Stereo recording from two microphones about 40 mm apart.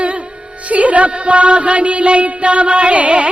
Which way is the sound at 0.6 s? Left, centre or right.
Right.